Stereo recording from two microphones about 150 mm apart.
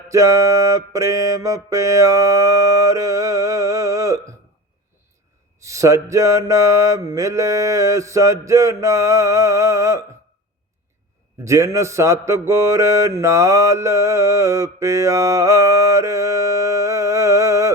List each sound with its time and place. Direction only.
0.1 s mantra: 20° right (ahead or behind)
5.5 s mantra: 20° right (ahead or behind)
11.4 s mantra: 20° right (ahead or behind)